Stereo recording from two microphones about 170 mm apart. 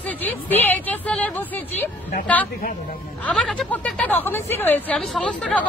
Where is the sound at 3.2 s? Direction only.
5° left (ahead or behind).